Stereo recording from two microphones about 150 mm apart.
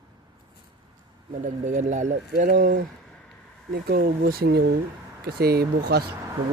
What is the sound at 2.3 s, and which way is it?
Speech, 65° right (ahead or behind).